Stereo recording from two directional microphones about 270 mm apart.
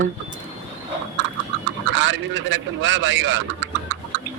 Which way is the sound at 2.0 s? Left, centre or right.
Right.